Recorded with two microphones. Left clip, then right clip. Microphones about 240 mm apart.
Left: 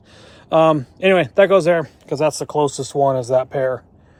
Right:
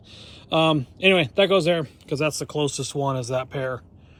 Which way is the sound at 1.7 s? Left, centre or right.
Centre.